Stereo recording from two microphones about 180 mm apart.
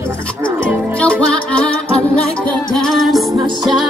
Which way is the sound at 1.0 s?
5° left (ahead or behind).